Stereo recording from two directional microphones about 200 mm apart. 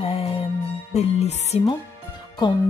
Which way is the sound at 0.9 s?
35° left (ahead or behind).